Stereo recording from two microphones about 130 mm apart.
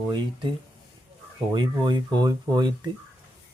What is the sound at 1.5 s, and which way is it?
Speech, 35° right (ahead or behind).